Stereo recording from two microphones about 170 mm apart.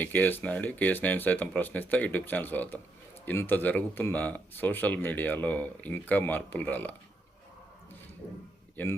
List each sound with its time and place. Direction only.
0.0 s speech: 10° left (ahead or behind)
8.7 s a man's voice: 10° left (ahead or behind)